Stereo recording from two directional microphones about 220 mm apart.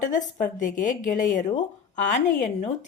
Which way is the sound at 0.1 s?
35° left (ahead or behind).